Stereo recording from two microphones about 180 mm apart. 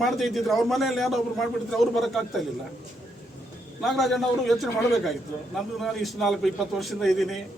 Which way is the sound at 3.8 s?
Centre (ahead or behind).